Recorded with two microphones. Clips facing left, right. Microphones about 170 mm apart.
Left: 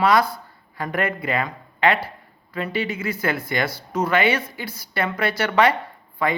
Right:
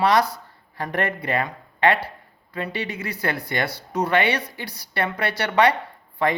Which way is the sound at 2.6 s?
35° right (ahead or behind).